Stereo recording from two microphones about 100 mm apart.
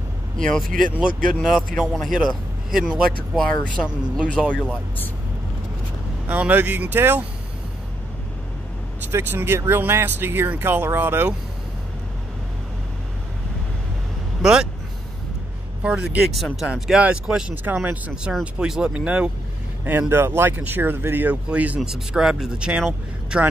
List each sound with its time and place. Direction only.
0.4 s speech: 5° left (ahead or behind)
0.9 s speech: 5° right (ahead or behind)
3.8 s speech: 10° left (ahead or behind)
6.2 s speech: 15° right (ahead or behind)
9.1 s speech: 20° right (ahead or behind)
14.4 s vehicle: 5° right (ahead or behind)
15.8 s speech: 10° right (ahead or behind)